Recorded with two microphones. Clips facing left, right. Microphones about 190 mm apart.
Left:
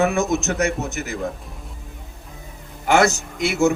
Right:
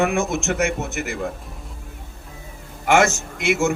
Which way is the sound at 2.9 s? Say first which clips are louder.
Even; 35° left (ahead or behind).